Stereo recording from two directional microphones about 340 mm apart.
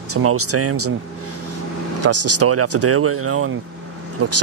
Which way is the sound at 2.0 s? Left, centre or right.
Right.